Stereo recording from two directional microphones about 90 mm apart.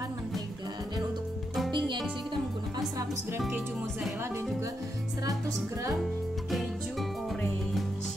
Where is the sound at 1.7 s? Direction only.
60° right (ahead or behind).